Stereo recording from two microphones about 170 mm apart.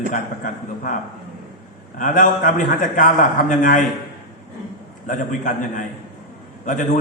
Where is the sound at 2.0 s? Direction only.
50° left (ahead or behind).